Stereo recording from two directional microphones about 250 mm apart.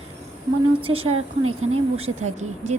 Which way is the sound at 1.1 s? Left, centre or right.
Right.